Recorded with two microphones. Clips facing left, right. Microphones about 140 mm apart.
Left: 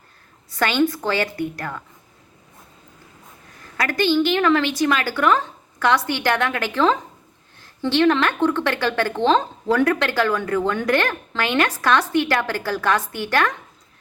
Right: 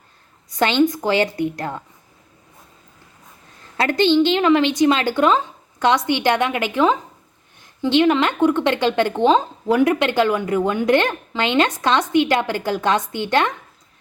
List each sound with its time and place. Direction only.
0.5 s a woman's voice: 20° right (ahead or behind)
3.8 s a woman's voice: 25° right (ahead or behind)